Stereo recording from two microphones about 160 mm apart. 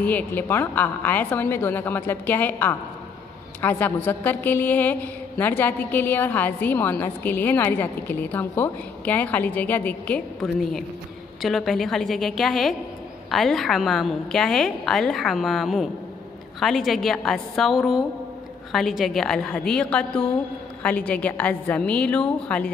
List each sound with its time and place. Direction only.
0.0 s a woman's voice: 10° left (ahead or behind)